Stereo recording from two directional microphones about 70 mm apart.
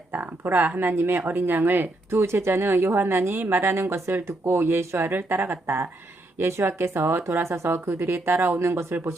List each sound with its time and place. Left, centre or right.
0.1 s speech: right